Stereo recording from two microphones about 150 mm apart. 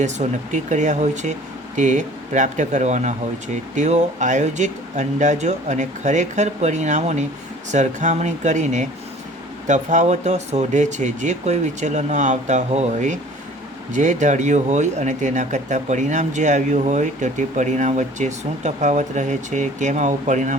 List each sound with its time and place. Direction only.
0.0 s speech: 55° right (ahead or behind)